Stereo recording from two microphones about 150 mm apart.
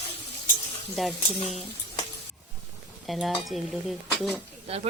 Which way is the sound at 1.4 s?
40° left (ahead or behind).